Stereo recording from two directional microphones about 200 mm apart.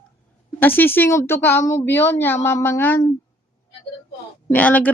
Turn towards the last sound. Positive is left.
turn(degrees=5)  # may be behind; listen again after turning